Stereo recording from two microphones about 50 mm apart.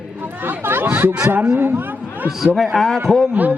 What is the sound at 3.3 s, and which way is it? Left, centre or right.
Speech, right.